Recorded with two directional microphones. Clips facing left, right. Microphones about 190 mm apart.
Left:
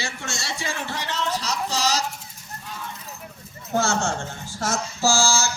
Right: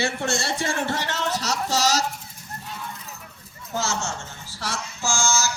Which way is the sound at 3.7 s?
55° left (ahead or behind).